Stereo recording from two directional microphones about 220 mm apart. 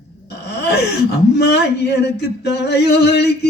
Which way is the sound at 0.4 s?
50° left (ahead or behind).